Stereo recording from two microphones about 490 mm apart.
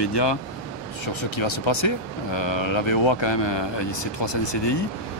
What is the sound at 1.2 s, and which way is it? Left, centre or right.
Speech, left.